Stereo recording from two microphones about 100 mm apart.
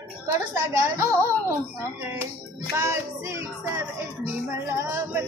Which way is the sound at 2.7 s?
30° right (ahead or behind).